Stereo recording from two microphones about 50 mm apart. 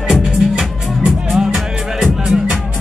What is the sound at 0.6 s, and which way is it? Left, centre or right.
Music, centre.